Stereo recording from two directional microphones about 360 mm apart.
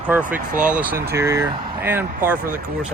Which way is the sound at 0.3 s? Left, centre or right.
Right.